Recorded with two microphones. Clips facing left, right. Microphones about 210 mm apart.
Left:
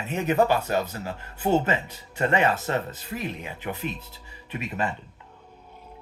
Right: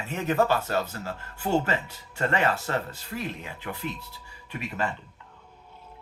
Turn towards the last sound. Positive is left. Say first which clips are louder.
# left 2 dB
turn(degrees=20)  # may be behind; listen again after turning